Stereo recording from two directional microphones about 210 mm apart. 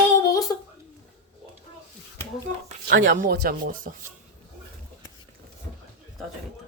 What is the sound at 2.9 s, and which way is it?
Speech, 60° right (ahead or behind).